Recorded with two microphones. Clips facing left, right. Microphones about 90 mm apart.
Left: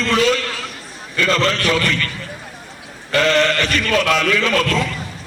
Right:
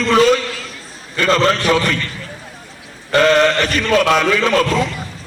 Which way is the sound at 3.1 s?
45° right (ahead or behind).